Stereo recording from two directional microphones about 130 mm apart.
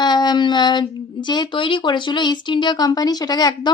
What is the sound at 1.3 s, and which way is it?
Speech, 35° left (ahead or behind).